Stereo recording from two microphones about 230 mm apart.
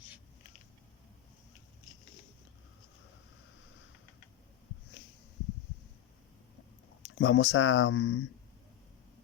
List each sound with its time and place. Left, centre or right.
7.2 s speech: left